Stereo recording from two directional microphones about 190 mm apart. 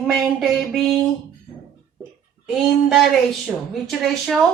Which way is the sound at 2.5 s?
Centre (ahead or behind).